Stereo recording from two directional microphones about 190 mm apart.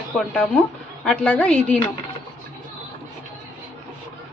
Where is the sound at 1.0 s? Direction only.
5° left (ahead or behind).